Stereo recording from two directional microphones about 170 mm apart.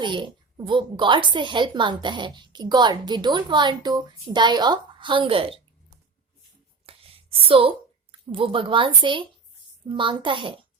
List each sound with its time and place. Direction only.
0.0 s speech: 25° right (ahead or behind)
6.8 s a sound: 35° right (ahead or behind)
8.3 s a woman's voice: 30° right (ahead or behind)